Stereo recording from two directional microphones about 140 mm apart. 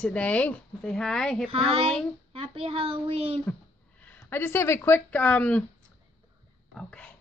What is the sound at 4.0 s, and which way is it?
Speech, 15° left (ahead or behind).